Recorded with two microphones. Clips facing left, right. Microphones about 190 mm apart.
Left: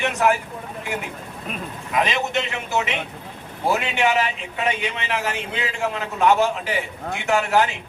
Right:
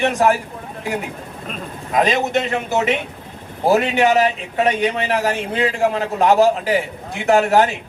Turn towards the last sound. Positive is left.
turn(degrees=-35)  # may be behind; listen again after turning